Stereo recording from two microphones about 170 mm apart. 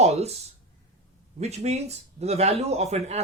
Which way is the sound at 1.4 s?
40° right (ahead or behind).